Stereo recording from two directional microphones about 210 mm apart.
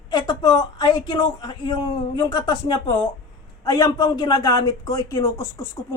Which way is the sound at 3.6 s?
20° left (ahead or behind).